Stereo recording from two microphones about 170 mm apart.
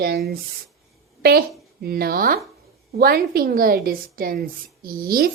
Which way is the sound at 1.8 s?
65° right (ahead or behind).